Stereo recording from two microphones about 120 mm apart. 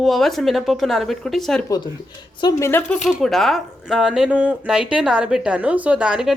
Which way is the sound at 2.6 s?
15° left (ahead or behind).